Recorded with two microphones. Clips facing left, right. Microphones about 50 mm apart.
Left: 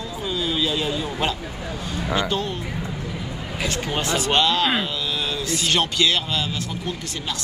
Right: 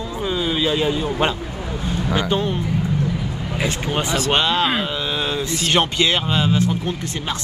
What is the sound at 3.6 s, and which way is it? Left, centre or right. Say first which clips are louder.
Speech: right 3 dB; centre.